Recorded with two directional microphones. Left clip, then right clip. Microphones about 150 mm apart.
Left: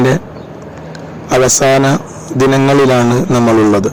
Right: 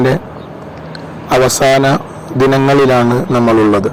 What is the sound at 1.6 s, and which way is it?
Speech, 5° left (ahead or behind).